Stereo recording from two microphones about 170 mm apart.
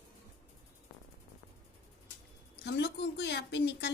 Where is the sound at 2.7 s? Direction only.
75° left (ahead or behind).